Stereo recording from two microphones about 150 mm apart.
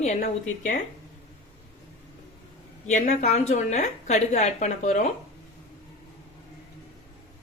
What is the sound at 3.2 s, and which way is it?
Speech, 45° left (ahead or behind).